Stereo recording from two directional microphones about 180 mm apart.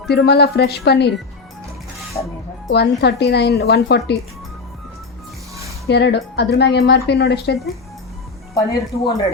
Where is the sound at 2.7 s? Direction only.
70° left (ahead or behind).